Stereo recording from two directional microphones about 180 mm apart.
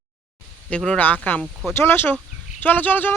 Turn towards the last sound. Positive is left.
turn(degrees=10)  # may be behind; listen again after turning